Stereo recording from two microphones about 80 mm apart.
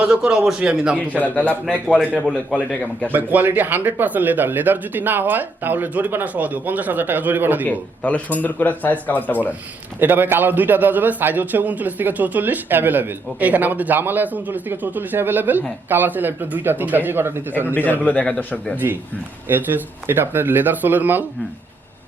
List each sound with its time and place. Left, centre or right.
0.0 s a man's voice: centre
0.9 s a man's voice: centre
3.1 s a man's voice: right
7.7 s speech: centre
10.0 s a man's voice: right
18.0 s a man's voice: centre
19.5 s a man's voice: right